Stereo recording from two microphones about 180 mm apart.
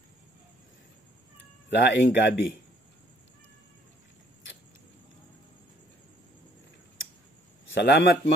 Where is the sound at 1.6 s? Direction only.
85° left.